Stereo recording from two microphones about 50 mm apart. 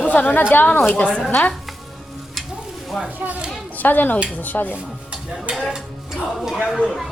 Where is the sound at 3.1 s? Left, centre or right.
Right.